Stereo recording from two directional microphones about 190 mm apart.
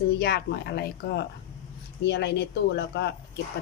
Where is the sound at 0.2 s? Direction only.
60° left (ahead or behind).